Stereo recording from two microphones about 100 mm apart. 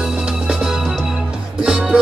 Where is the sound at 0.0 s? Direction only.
5° right (ahead or behind).